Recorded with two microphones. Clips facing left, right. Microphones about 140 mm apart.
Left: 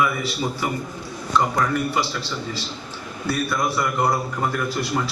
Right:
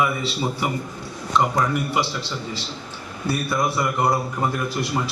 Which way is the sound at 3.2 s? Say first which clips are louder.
Even; 25° right (ahead or behind).